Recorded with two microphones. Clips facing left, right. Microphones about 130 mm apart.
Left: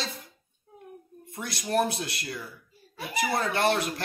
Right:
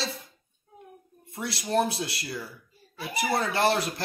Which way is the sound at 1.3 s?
30° right (ahead or behind).